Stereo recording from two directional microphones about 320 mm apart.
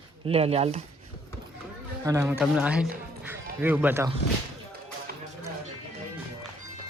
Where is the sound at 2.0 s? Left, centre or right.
Centre.